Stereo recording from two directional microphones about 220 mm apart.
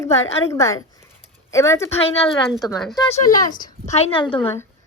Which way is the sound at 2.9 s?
15° left (ahead or behind).